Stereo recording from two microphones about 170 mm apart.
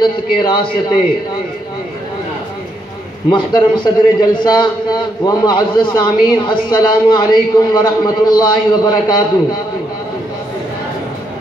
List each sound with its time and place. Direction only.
0.0 s a man's voice: 25° left (ahead or behind)
3.3 s a man's voice: 25° left (ahead or behind)